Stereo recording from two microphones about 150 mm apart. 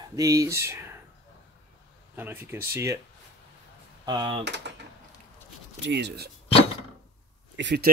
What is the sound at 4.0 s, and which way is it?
Speech, 30° right (ahead or behind).